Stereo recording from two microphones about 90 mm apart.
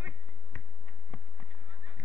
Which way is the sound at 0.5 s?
15° left (ahead or behind).